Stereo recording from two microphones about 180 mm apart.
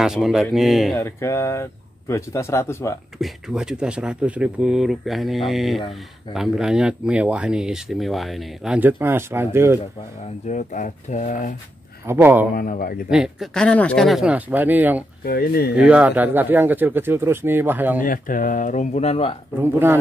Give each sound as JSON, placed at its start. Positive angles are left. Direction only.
{"t": 0.0, "sound": "speech", "side_deg": -5}
{"t": 0.9, "sound": "speech", "side_deg": 15}
{"t": 3.2, "sound": "speech", "side_deg": 0}
{"t": 10.5, "sound": "speech", "side_deg": 45}
{"t": 12.1, "sound": "speech", "side_deg": -10}
{"t": 12.5, "sound": "speech", "side_deg": 55}
{"t": 13.1, "sound": "speech", "side_deg": 0}
{"t": 15.2, "sound": "speech", "side_deg": 55}
{"t": 15.7, "sound": "speech", "side_deg": -5}
{"t": 18.0, "sound": "speech", "side_deg": 50}
{"t": 19.6, "sound": "speech", "side_deg": -10}